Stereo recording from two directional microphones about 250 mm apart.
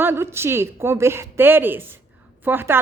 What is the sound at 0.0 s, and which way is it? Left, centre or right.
A woman's voice, centre.